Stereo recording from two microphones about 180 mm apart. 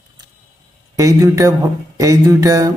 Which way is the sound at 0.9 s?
15° right (ahead or behind).